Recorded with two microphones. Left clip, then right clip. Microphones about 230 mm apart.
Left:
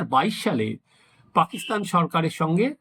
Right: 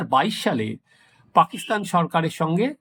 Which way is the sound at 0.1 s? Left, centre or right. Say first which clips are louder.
Right 2 dB; centre.